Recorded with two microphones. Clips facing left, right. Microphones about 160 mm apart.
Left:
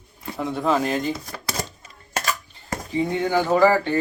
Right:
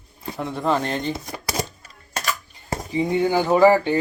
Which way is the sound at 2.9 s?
15° right (ahead or behind).